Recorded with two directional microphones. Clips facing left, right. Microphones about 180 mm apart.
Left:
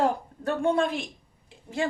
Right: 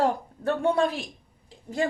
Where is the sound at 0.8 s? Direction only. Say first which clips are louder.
Right 1 dB; 35° right (ahead or behind).